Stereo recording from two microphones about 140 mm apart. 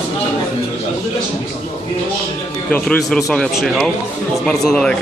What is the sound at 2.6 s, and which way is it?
Speech, 10° left (ahead or behind).